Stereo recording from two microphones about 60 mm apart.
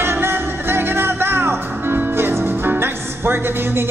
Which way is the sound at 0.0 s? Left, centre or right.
Right.